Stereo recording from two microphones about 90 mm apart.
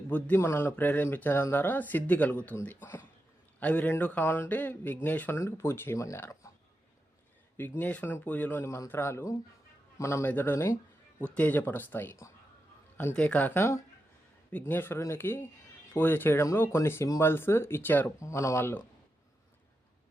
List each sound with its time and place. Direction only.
0.3 s speech: 30° left (ahead or behind)
7.5 s speech: 20° left (ahead or behind)
11.2 s speech: 15° left (ahead or behind)
13.1 s speech: 15° left (ahead or behind)
18.2 s speech: 35° left (ahead or behind)